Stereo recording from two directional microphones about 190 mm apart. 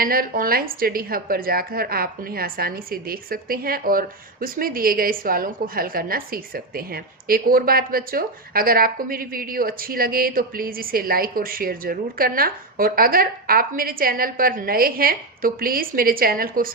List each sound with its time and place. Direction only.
0.0 s a woman's voice: 50° right (ahead or behind)